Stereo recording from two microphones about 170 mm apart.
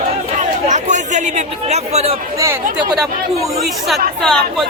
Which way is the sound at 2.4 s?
20° right (ahead or behind).